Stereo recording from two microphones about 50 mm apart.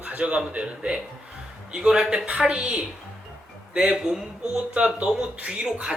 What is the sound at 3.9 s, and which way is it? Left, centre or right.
Speech, centre.